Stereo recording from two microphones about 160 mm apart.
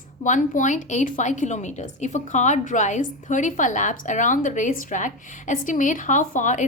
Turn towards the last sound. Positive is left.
turn(degrees=50)  # may be behind; listen again after turning